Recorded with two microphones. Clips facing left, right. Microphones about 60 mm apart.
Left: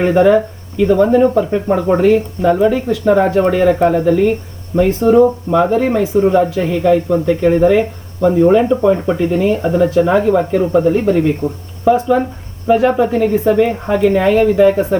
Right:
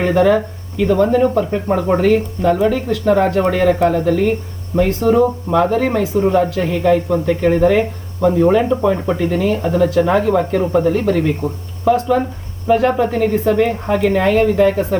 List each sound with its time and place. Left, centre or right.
0.0 s speech: centre
11.9 s speech: centre